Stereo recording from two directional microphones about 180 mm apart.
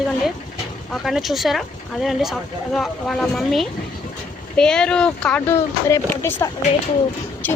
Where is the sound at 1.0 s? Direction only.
Centre (ahead or behind).